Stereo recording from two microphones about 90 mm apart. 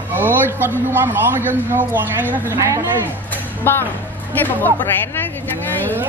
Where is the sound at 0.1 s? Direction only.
20° right (ahead or behind).